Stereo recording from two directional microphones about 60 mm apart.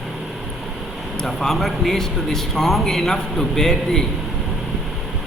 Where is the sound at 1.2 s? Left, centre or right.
Centre.